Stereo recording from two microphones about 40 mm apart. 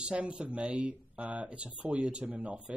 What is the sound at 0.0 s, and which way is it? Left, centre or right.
Speech, right.